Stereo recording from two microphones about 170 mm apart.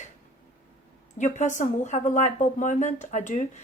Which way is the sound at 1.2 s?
45° left (ahead or behind).